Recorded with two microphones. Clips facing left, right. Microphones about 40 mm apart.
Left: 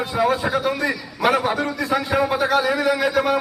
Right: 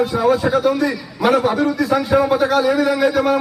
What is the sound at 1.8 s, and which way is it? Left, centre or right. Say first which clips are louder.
A man's voice: right 3 dB; centre.